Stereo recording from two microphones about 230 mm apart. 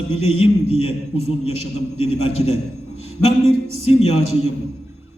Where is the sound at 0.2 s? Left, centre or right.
Left.